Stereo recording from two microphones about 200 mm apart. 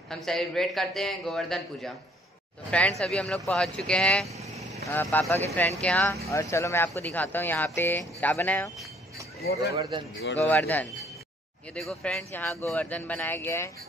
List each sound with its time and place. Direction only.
0.1 s speech: centre (ahead or behind)
9.4 s speech: 50° left (ahead or behind)
10.4 s speech: 10° left (ahead or behind)